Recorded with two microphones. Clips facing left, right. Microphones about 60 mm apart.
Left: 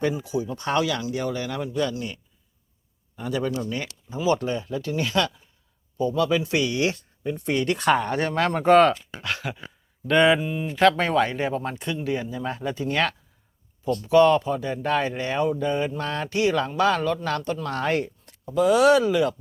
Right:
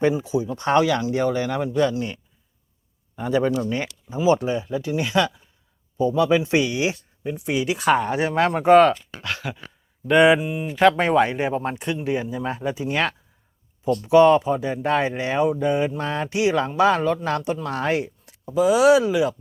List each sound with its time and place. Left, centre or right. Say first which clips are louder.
0.0 s speech: right 4 dB; right
3.2 s speech: right 5 dB; right; by 9.6 s centre
10.1 s speech: right 3 dB; centre